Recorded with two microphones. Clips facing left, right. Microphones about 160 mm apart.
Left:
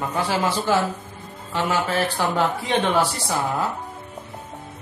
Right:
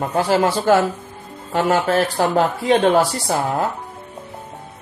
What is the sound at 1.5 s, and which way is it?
Speech, 45° right (ahead or behind).